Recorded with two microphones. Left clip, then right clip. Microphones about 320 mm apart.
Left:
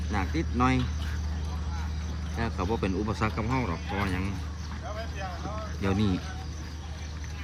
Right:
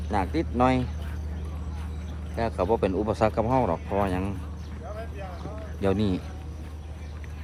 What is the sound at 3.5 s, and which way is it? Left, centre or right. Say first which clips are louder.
Speech: right 7 dB; right.